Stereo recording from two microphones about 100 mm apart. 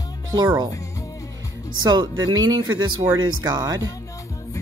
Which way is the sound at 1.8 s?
45° right (ahead or behind).